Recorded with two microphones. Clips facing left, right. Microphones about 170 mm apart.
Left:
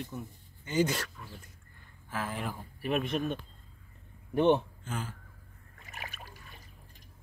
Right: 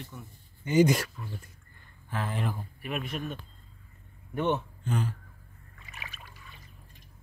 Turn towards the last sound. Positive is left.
turn(degrees=45)  # may be behind; listen again after turning